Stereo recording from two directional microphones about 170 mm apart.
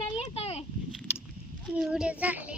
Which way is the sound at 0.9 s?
5° right (ahead or behind).